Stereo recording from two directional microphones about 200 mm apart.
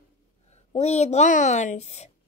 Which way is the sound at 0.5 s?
35° left (ahead or behind).